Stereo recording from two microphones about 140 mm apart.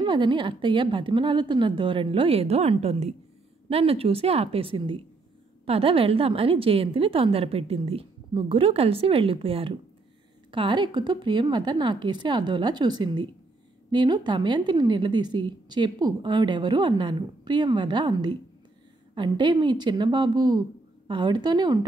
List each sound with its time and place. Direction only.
0.0 s a woman's voice: 35° right (ahead or behind)